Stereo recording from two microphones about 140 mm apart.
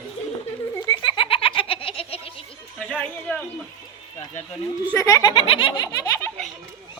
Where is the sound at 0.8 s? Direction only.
35° left (ahead or behind).